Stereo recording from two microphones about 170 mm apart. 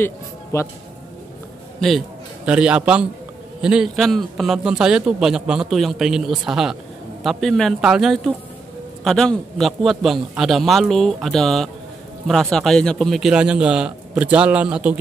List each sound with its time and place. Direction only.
0.0 s speech: 15° left (ahead or behind)
1.8 s a man's voice: centre (ahead or behind)